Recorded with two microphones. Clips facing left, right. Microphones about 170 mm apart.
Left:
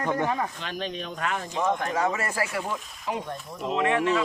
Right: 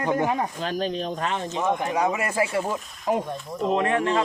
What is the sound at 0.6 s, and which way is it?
Speech, 40° right (ahead or behind).